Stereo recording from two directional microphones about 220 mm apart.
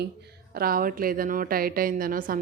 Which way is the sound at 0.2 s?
40° right (ahead or behind).